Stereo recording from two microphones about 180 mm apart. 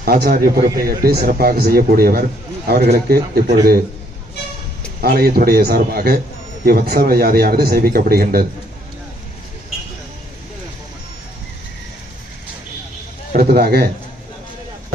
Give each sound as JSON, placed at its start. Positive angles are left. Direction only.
{"t": 0.0, "sound": "a man's voice", "side_deg": -55}
{"t": 5.0, "sound": "a man's voice", "side_deg": -55}
{"t": 13.3, "sound": "a man's voice", "side_deg": -55}